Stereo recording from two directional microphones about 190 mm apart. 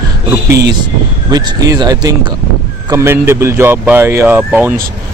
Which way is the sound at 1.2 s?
20° right (ahead or behind).